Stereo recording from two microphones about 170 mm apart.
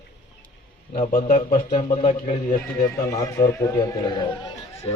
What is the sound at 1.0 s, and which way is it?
Speech, 55° left (ahead or behind).